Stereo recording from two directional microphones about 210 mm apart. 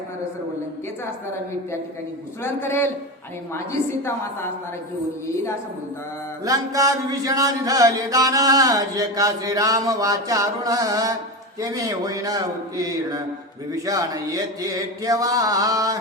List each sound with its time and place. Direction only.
2.4 s a man's voice: 10° left (ahead or behind)
6.4 s music: 15° right (ahead or behind)